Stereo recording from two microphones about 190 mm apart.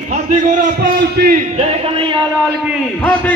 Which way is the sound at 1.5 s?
30° right (ahead or behind).